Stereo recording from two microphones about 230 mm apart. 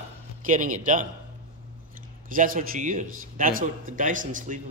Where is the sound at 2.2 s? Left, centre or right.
Right.